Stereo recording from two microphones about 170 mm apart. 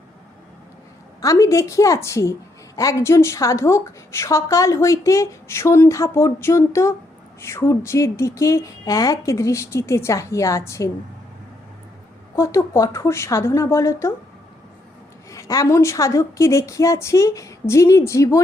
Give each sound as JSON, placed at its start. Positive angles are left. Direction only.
{"t": 1.2, "sound": "a woman's voice", "side_deg": 20}
{"t": 12.4, "sound": "a woman's voice", "side_deg": 15}
{"t": 15.3, "sound": "a woman's voice", "side_deg": 20}